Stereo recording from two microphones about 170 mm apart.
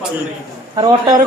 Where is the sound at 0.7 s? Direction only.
25° right (ahead or behind).